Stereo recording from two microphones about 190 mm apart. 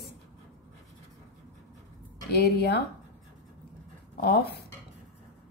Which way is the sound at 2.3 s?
60° left (ahead or behind).